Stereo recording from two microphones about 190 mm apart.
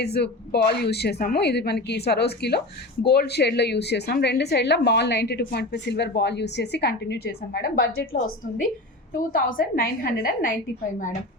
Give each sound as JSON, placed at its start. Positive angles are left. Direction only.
{"t": 0.0, "sound": "a woman's voice", "side_deg": 60}